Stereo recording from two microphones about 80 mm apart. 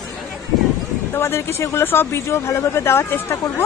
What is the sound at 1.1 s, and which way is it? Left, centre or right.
Speech, left.